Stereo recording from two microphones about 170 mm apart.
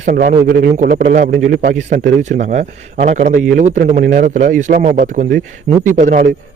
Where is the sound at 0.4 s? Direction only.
60° right (ahead or behind); by 4.9 s 40° right (ahead or behind).